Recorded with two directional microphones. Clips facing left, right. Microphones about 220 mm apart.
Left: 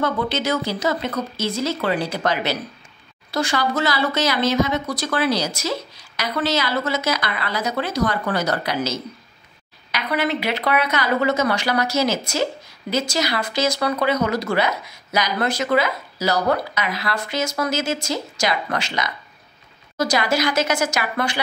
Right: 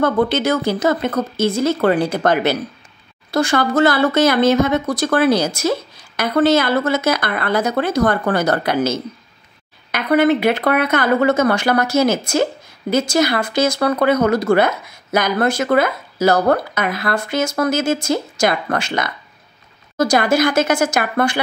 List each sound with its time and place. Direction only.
0.0 s speech: 50° right (ahead or behind)